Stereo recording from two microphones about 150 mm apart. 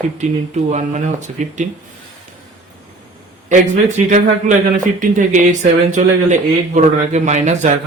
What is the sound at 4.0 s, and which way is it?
Speech, 55° right (ahead or behind).